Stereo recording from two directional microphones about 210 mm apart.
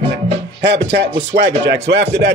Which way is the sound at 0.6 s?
55° right (ahead or behind).